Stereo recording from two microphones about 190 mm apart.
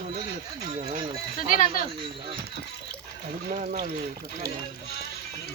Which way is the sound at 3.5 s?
40° right (ahead or behind).